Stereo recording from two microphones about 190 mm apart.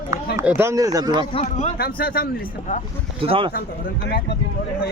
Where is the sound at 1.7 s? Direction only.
50° left (ahead or behind).